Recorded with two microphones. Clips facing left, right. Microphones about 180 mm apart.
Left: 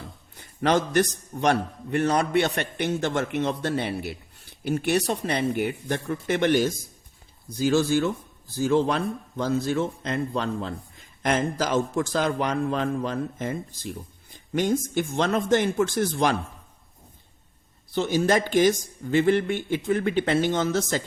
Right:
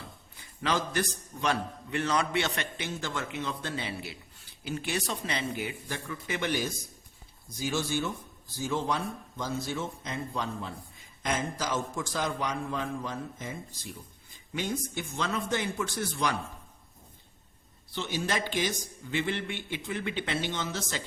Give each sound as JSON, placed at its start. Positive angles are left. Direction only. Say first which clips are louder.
{"t": 0.3, "sound": "a man's voice", "louder": "left 8 dB", "side_deg": 70}
{"t": 8.5, "sound": "a man's voice", "louder": "left 9 dB", "side_deg": 70}
{"t": 11.3, "sound": "a man's voice", "louder": "left 7 dB", "side_deg": 65}
{"t": 14.9, "sound": "a man's voice", "louder": "left 9 dB", "side_deg": 75}
{"t": 15.8, "sound": "speech", "louder": "left 10 dB", "side_deg": 50}
{"t": 17.9, "sound": "speech", "louder": "left 10 dB", "side_deg": 45}